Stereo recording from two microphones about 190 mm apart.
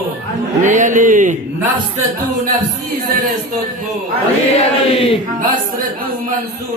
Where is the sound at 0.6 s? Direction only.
40° right (ahead or behind).